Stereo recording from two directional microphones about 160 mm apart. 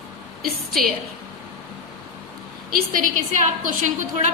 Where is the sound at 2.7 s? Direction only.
60° right (ahead or behind).